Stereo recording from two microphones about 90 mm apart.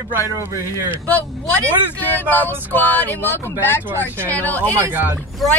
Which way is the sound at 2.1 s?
20° left (ahead or behind).